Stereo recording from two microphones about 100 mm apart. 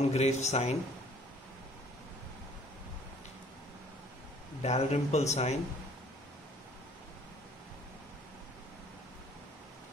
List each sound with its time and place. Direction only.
0.1 s a man's voice: 90° left
4.6 s a man's voice: 90° left